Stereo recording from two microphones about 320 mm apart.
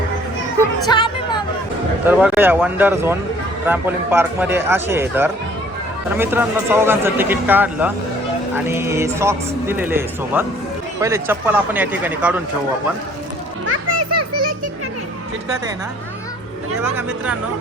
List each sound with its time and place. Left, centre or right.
0.6 s music: centre
2.0 s speech: centre
13.7 s children playing: right
16.9 s speech: centre